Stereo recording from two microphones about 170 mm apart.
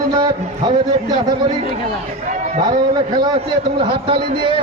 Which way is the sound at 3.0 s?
25° right (ahead or behind).